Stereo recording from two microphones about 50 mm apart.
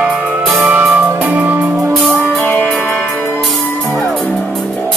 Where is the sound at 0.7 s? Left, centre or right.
Right.